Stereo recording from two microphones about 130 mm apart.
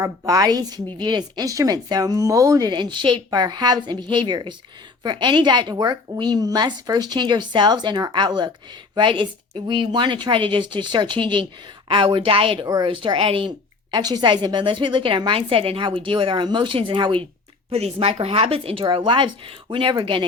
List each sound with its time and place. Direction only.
0.0 s a woman's voice: 25° right (ahead or behind); by 12.6 s 45° right (ahead or behind)
12.6 s a woman's voice: 30° right (ahead or behind)
12.9 s a woman's voice: 40° right (ahead or behind)
13.9 s a woman's voice: 30° right (ahead or behind)
17.7 s a woman's voice: 50° right (ahead or behind)